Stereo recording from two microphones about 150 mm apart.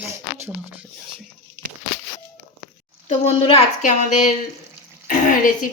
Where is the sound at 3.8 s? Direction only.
55° left (ahead or behind).